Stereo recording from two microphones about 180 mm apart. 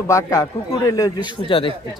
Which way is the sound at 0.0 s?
15° left (ahead or behind).